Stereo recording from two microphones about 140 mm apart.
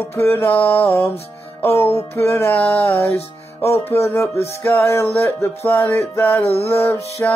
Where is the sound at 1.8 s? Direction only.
45° left (ahead or behind).